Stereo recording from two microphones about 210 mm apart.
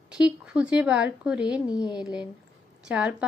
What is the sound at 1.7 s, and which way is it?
Speech, 20° left (ahead or behind).